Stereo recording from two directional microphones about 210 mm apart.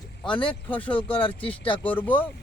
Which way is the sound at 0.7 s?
5° left (ahead or behind).